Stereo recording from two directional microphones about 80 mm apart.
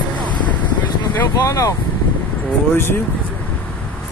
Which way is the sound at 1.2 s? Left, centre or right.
Left.